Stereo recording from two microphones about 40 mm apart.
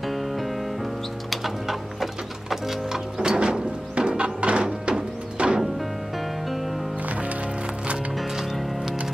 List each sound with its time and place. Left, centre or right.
1.3 s a sound: centre
2.5 s music: centre
3.2 s music: right